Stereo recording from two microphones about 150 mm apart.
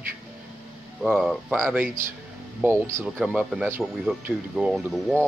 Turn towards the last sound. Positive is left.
turn(degrees=5)  # may be behind; listen again after turning